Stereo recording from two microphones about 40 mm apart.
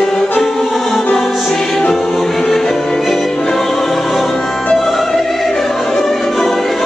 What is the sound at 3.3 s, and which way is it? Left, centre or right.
Choir, centre.